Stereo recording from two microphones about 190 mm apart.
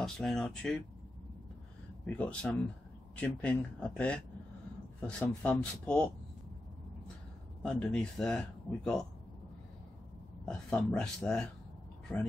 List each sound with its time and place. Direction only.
0.0 s speech: 5° left (ahead or behind)
2.0 s speech: 5° left (ahead or behind)
7.6 s speech: 5° left (ahead or behind)
10.4 s speech: 5° left (ahead or behind)